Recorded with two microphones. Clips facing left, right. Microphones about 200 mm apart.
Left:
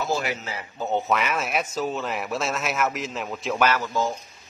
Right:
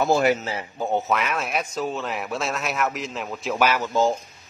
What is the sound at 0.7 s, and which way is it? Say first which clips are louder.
Speech: right 1 dB; 10° right (ahead or behind).